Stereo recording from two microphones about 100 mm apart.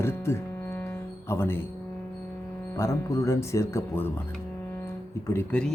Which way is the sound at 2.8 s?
30° left (ahead or behind).